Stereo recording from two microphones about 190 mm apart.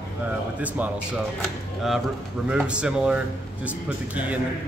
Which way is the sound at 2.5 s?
5° right (ahead or behind).